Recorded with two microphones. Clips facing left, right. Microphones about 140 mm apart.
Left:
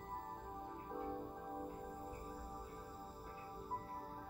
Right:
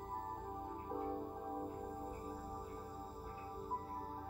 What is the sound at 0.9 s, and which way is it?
Music, 20° right (ahead or behind).